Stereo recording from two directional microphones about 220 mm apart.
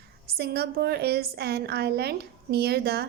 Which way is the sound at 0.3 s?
45° right (ahead or behind).